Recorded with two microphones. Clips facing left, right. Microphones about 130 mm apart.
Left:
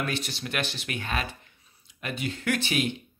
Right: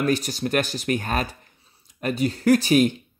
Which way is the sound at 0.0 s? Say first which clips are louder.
Right 9 dB; 40° right (ahead or behind).